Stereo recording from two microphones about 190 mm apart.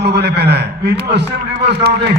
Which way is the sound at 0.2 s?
60° right (ahead or behind).